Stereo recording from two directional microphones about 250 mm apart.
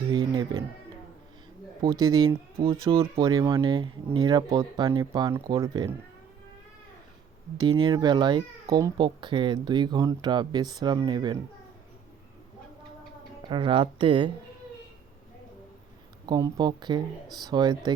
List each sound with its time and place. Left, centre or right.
0.1 s music: centre
1.8 s speech: centre
7.6 s speech: centre
13.5 s speech: centre
16.2 s speech: centre